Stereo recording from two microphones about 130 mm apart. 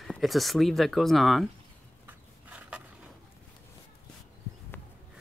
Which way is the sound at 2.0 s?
10° right (ahead or behind).